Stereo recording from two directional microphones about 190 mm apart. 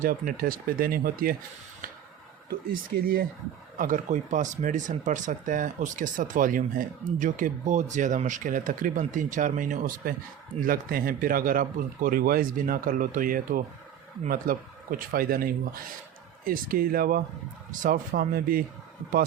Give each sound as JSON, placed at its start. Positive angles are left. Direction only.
{"t": 0.0, "sound": "speech", "side_deg": -50}
{"t": 2.5, "sound": "speech", "side_deg": -50}